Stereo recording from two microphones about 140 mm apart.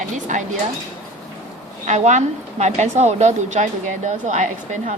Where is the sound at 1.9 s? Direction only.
60° right (ahead or behind).